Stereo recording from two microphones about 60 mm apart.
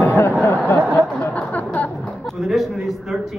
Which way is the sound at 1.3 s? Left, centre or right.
Left.